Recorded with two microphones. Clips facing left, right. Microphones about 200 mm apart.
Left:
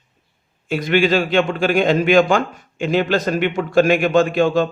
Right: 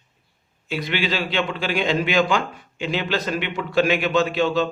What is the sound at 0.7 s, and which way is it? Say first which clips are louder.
A man's voice: left 8 dB; 50° left (ahead or behind).